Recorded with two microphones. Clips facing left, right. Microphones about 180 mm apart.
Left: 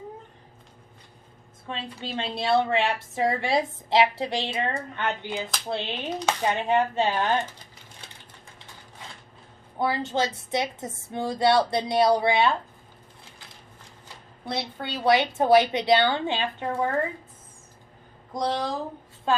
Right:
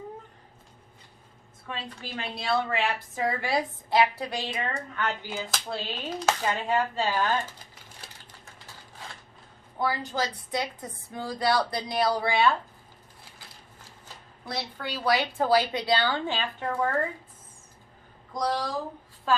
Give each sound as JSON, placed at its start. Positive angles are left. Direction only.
{"t": 1.6, "sound": "a woman's voice", "side_deg": 30}
{"t": 9.7, "sound": "a woman's voice", "side_deg": 25}
{"t": 14.4, "sound": "a woman's voice", "side_deg": 25}
{"t": 18.3, "sound": "a woman's voice", "side_deg": 25}